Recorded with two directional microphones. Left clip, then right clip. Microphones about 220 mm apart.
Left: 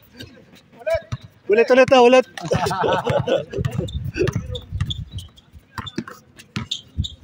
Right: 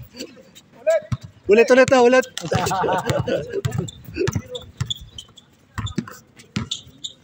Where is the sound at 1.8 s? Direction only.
15° left (ahead or behind).